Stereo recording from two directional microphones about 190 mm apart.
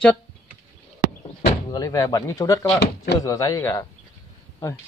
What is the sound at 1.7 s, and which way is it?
A man's voice, 20° left (ahead or behind).